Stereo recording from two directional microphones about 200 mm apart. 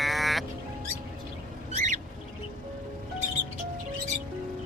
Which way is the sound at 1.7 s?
35° right (ahead or behind).